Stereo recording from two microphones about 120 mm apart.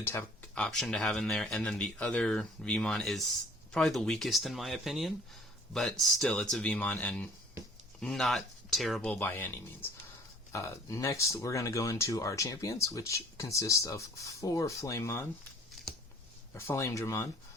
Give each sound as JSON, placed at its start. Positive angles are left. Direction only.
{"t": 0.0, "sound": "speech", "side_deg": 20}
{"t": 0.5, "sound": "speech", "side_deg": 5}
{"t": 9.0, "sound": "speech", "side_deg": 15}
{"t": 15.7, "sound": "a sound", "side_deg": 5}
{"t": 16.6, "sound": "speech", "side_deg": 25}